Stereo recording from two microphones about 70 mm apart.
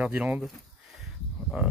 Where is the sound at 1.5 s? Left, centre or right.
Centre.